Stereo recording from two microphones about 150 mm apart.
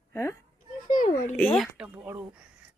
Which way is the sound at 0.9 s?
60° left (ahead or behind).